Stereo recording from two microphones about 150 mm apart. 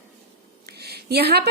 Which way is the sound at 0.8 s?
90° right.